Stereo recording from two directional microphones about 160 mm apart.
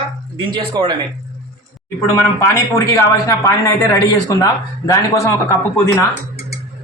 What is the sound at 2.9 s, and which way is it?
Speech, 20° left (ahead or behind).